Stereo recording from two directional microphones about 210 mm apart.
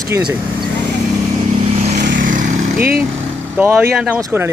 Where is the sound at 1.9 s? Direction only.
45° right (ahead or behind).